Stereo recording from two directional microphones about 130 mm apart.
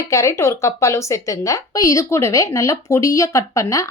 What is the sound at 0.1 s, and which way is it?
Speech, 25° left (ahead or behind).